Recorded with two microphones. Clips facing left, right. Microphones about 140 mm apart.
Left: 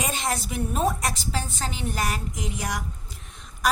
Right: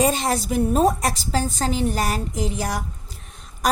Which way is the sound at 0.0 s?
35° right (ahead or behind).